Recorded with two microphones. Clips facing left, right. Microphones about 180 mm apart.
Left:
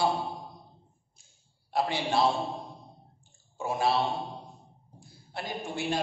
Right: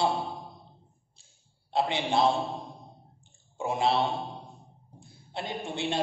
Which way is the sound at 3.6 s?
20° right (ahead or behind).